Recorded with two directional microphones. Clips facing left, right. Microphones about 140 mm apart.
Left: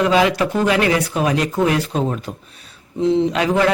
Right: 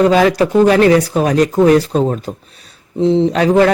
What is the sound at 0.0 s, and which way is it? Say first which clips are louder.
Speech: right 5 dB; 40° right (ahead or behind).